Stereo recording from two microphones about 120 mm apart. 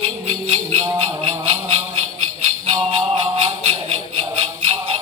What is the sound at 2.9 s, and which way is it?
Music, 50° right (ahead or behind).